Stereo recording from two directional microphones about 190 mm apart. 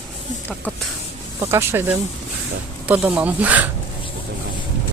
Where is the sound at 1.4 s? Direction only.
15° right (ahead or behind).